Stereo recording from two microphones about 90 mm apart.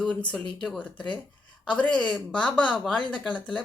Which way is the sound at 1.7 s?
15° left (ahead or behind).